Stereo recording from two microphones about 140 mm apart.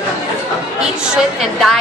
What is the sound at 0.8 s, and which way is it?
A woman's voice, 5° right (ahead or behind).